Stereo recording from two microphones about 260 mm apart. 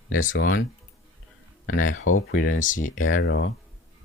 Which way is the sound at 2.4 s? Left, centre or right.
Left.